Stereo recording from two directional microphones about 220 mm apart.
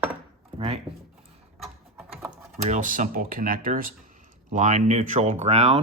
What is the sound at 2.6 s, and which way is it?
Speech, 35° right (ahead or behind).